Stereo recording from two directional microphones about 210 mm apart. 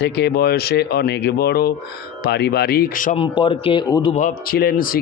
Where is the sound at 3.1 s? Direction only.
25° left (ahead or behind).